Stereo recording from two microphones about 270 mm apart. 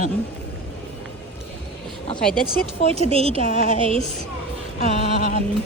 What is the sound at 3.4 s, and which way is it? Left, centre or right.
Speech, left.